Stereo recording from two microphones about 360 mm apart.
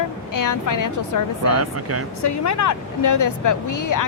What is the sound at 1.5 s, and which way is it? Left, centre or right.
Speech, right.